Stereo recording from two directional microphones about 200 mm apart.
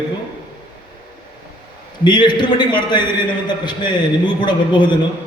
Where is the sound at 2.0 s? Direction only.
20° left (ahead or behind).